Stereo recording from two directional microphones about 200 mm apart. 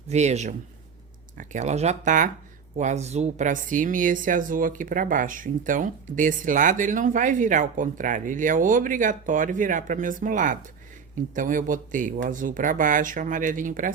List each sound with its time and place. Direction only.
0.1 s speech: 35° right (ahead or behind)